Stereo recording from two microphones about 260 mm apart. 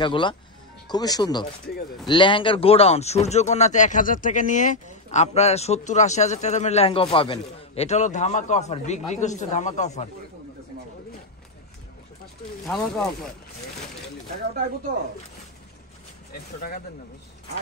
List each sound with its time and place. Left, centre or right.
0.0 s speech: centre
12.6 s speech: centre